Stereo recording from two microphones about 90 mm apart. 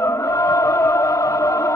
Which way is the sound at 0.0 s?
35° left (ahead or behind).